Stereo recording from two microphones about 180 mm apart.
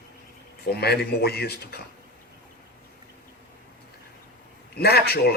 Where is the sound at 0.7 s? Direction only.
60° left (ahead or behind).